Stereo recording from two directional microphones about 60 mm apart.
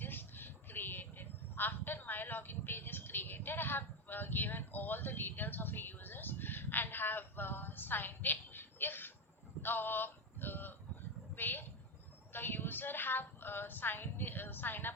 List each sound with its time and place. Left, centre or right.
0.0 s vehicle: left
9.6 s male singing: left
11.3 s a sound: left
12.3 s a woman's voice: left